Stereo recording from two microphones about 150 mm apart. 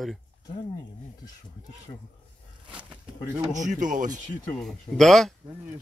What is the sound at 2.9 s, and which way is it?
Speech, 10° right (ahead or behind).